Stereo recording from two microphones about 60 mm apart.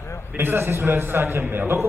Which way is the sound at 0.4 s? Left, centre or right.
Right.